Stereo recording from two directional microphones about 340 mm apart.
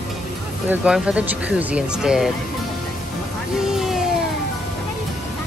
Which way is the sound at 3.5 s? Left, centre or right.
Centre.